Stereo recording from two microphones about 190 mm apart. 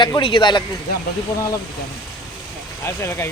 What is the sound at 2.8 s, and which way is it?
Speech, 15° left (ahead or behind).